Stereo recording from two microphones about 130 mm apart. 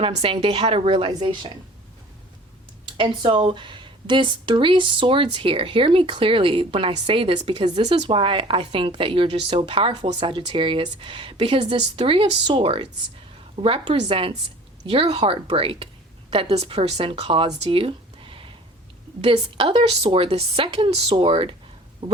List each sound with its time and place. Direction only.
0.0 s speech: 45° right (ahead or behind)
3.0 s speech: 40° right (ahead or behind)
22.0 s a sound: 45° right (ahead or behind)